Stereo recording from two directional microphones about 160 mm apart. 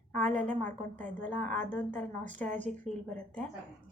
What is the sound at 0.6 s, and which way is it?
A woman's voice, 10° left (ahead or behind).